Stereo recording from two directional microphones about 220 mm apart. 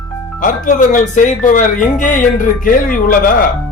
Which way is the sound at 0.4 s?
35° left (ahead or behind).